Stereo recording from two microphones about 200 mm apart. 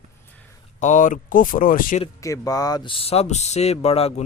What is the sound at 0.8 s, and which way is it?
Speech, 40° left (ahead or behind).